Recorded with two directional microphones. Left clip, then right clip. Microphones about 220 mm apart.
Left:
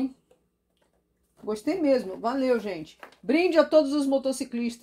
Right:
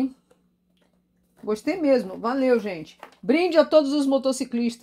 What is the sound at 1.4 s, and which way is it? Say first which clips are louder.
Speech: right 2 dB; 30° right (ahead or behind).